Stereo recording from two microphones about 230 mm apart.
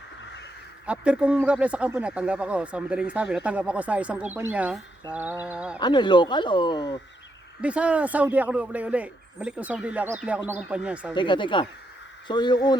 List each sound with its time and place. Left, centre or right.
0.9 s speech: centre
5.1 s a sound: centre
5.5 s speech: centre
5.8 s speech: centre
7.6 s speech: centre
11.1 s speech: left